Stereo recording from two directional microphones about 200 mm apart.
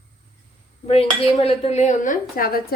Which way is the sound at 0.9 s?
30° left (ahead or behind).